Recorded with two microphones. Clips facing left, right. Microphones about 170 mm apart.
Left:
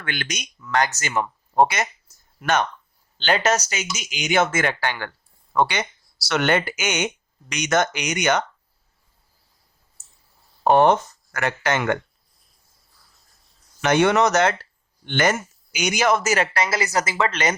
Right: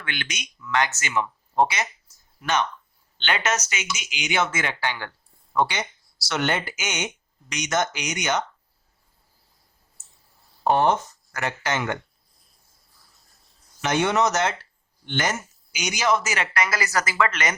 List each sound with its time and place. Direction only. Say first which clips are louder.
0.0 s speech: left 3 dB; 45° left (ahead or behind)
3.2 s speech: left 5 dB; 35° left (ahead or behind); by 8.4 s 60° left (ahead or behind)
10.6 s speech: left 4 dB; 60° left (ahead or behind)
13.8 s speech: left 4 dB; 60° left (ahead or behind); by 16.5 s 45° left (ahead or behind)
16.6 s speech: left 3 dB; 25° left (ahead or behind)